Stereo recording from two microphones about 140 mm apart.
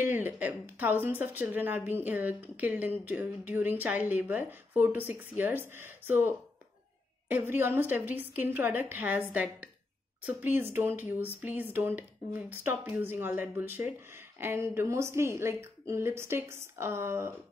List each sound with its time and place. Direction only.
0.0 s speech: 15° right (ahead or behind)